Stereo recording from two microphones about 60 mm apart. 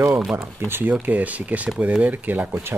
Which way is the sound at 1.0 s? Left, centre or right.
Right.